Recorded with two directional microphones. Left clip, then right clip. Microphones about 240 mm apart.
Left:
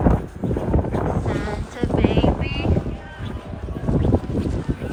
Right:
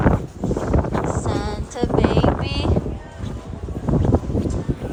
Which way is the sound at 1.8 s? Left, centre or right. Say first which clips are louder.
Right 2 dB; centre.